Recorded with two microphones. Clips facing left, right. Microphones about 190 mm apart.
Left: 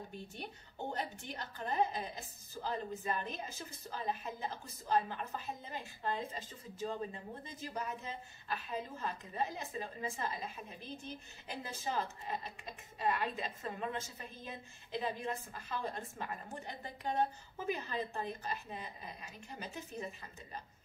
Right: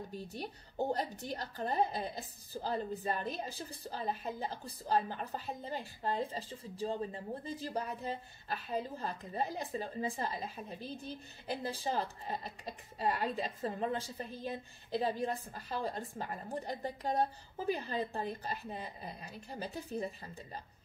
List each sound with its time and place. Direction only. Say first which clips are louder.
0.1 s a woman's voice: right 4 dB; 40° right (ahead or behind)